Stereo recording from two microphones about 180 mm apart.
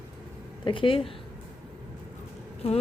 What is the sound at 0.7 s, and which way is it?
Speech, 30° left (ahead or behind).